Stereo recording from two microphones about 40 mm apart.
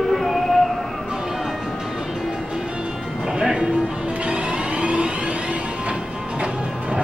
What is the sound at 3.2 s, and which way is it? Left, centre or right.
Music, centre.